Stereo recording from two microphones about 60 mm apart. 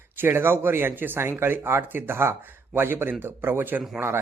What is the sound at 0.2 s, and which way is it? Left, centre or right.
Speech, right.